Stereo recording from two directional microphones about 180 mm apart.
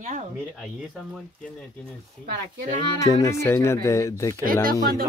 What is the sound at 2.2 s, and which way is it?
Speech, 60° right (ahead or behind).